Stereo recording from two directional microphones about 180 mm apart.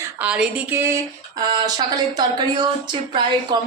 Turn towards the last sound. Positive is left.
turn(degrees=-25)  # may be behind; listen again after turning